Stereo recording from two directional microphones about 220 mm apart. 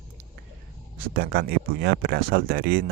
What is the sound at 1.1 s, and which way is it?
Speech, 45° right (ahead or behind).